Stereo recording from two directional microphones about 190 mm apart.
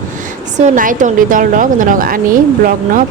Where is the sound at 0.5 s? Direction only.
40° right (ahead or behind).